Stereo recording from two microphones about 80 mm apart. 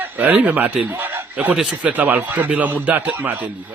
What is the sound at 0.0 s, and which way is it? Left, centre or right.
Speech, right.